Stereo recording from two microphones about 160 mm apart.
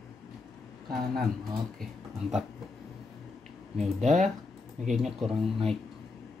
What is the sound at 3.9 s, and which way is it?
Speech, 45° right (ahead or behind).